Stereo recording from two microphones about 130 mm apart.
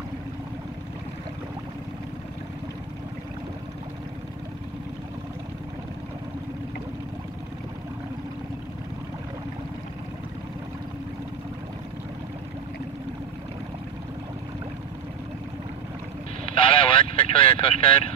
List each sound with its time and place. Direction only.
16.5 s vehicle: 40° left (ahead or behind)